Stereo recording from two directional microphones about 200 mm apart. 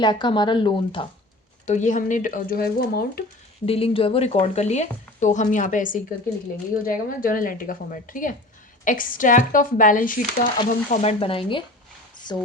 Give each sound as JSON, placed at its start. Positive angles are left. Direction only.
{"t": 0.0, "sound": "speech", "side_deg": 20}
{"t": 1.6, "sound": "speech", "side_deg": 35}
{"t": 3.7, "sound": "speech", "side_deg": 30}
{"t": 11.2, "sound": "speech", "side_deg": 25}